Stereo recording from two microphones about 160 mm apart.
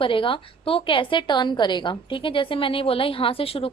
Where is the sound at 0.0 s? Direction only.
35° left (ahead or behind).